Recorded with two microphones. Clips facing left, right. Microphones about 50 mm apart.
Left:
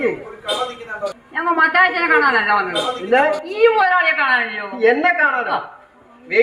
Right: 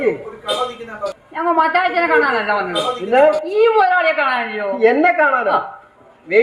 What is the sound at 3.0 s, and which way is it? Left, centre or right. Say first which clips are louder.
A woman's voice: right 3 dB; left.